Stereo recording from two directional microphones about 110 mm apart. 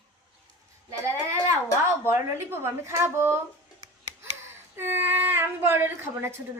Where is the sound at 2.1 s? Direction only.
25° right (ahead or behind).